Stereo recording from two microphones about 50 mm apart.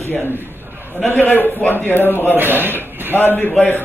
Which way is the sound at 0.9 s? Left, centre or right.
Left.